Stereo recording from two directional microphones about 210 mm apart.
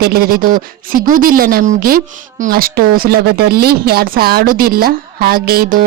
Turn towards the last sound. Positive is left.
turn(degrees=-45)  # may be behind; listen again after turning